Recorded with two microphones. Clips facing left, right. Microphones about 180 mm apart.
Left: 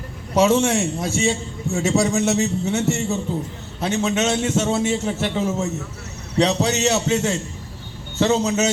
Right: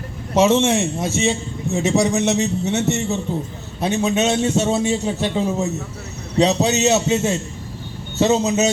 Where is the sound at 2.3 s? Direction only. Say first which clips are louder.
Right 1 dB; 20° right (ahead or behind).